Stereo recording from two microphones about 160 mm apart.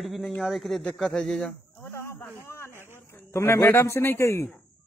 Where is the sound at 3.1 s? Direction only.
15° left (ahead or behind).